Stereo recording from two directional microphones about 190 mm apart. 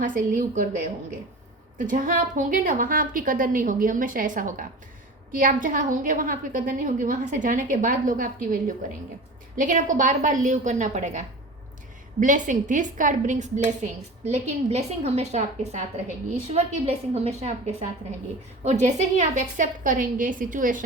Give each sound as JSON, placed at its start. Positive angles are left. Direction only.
{"t": 0.0, "sound": "a woman's voice", "side_deg": -45}